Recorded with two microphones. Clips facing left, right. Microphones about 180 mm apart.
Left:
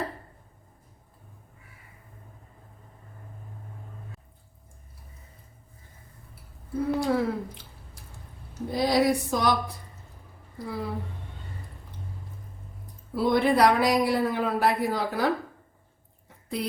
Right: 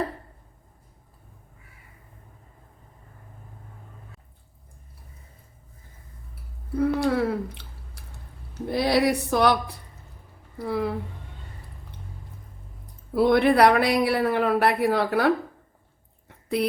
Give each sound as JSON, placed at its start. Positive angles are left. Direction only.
{"t": 6.7, "sound": "speech", "side_deg": -65}
{"t": 8.7, "sound": "speech", "side_deg": -65}
{"t": 13.1, "sound": "speech", "side_deg": -65}